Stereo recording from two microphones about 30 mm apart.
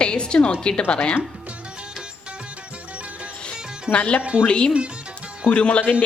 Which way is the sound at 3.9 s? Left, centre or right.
Left.